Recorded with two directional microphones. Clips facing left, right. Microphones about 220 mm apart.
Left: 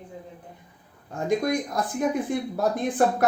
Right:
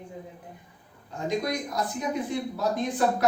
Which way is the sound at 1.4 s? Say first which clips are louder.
Left 4 dB; 50° left (ahead or behind).